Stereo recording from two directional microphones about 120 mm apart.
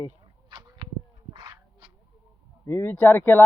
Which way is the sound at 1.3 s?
35° right (ahead or behind).